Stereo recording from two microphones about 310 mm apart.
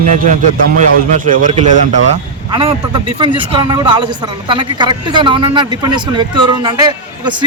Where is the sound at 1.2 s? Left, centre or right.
Right.